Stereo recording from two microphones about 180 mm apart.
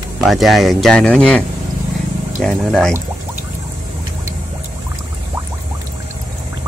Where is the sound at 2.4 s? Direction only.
5° left (ahead or behind).